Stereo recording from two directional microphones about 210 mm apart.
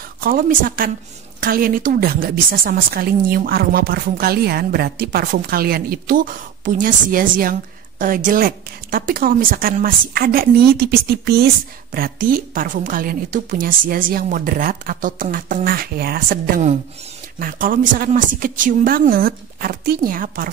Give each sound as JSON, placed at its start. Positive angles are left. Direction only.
{"t": 0.2, "sound": "a woman's voice", "side_deg": -40}